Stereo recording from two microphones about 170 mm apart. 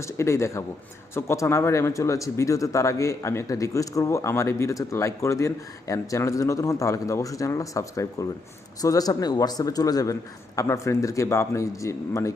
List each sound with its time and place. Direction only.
0.0 s speech: 15° left (ahead or behind)